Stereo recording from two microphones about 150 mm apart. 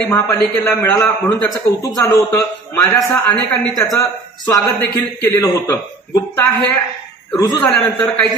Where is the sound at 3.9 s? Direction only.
20° left (ahead or behind).